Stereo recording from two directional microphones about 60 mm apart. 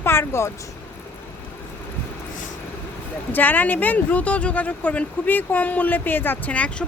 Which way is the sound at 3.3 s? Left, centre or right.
Left.